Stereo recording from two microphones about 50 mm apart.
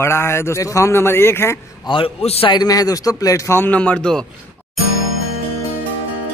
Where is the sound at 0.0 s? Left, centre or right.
Left.